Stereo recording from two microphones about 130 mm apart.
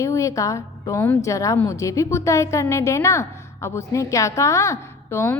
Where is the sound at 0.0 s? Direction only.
25° left (ahead or behind).